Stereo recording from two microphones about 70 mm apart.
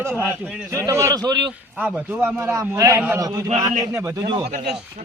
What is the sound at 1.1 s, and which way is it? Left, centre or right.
Speech, right.